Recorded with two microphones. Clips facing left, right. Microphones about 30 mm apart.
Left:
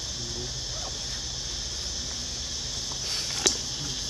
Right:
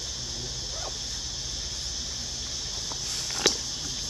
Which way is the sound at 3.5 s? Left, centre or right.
Right.